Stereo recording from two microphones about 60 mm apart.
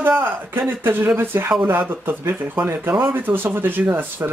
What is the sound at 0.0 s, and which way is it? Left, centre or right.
Speech, right.